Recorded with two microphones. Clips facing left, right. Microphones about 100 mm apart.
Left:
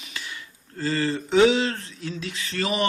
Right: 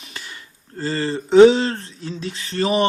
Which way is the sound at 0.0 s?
40° right (ahead or behind).